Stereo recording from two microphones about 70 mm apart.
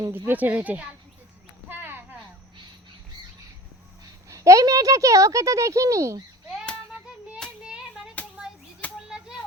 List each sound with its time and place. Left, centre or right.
0.1 s speech: right
1.7 s a sound: right
4.3 s speech: right
7.6 s child singing: centre
8.8 s children playing: left